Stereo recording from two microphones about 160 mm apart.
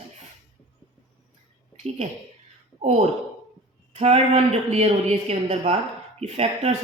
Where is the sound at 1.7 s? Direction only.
45° right (ahead or behind).